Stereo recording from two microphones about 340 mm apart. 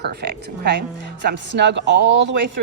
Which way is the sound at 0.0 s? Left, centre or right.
Right.